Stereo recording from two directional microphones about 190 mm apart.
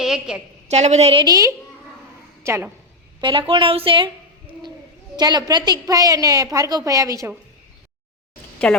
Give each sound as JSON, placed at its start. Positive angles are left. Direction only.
{"t": 0.0, "sound": "a sound", "side_deg": -5}
{"t": 0.7, "sound": "a woman's voice", "side_deg": -35}
{"t": 3.2, "sound": "speech", "side_deg": -25}
{"t": 5.1, "sound": "a woman's voice", "side_deg": -20}
{"t": 8.7, "sound": "a woman's voice", "side_deg": 5}